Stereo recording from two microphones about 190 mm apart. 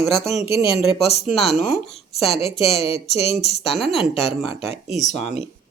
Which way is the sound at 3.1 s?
35° left (ahead or behind).